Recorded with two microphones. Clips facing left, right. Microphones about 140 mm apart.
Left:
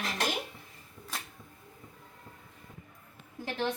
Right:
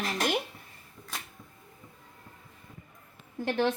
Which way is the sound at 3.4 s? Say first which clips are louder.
Right 6 dB; 70° right (ahead or behind).